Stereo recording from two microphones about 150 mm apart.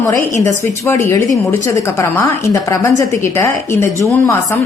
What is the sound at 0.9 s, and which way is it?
A woman's voice, 15° left (ahead or behind).